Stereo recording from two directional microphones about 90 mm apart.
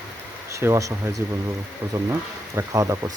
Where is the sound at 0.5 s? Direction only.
35° right (ahead or behind).